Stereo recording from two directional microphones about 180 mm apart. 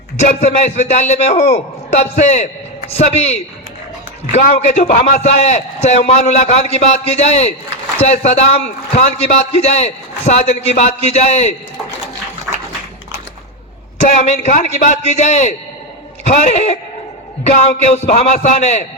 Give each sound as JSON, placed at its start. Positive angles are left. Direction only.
{"t": 0.2, "sound": "a man's voice", "side_deg": 40}
{"t": 14.0, "sound": "a man's voice", "side_deg": 40}
{"t": 17.9, "sound": "a man's voice", "side_deg": 40}